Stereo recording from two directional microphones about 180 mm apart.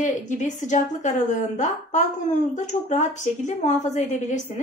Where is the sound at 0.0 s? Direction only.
40° left (ahead or behind).